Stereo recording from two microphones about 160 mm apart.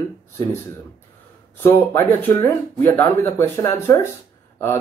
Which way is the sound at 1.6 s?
15° left (ahead or behind).